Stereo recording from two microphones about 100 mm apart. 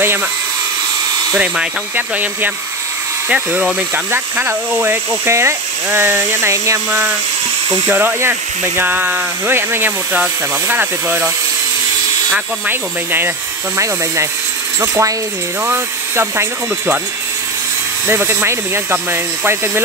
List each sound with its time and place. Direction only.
1.4 s speech: 15° right (ahead or behind)
12.6 s speech: 20° right (ahead or behind)
14.8 s mechanisms: 30° right (ahead or behind)
15.6 s speech: 25° right (ahead or behind)
18.0 s speech: 25° right (ahead or behind)